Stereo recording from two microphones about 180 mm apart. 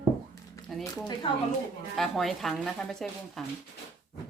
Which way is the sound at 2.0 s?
Centre (ahead or behind).